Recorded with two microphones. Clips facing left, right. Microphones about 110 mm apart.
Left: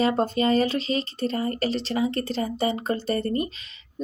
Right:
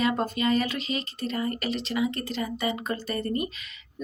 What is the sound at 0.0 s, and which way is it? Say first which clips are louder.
Speech: left 4 dB; 30° left (ahead or behind).